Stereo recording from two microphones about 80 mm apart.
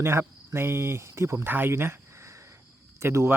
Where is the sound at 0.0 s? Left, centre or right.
Right.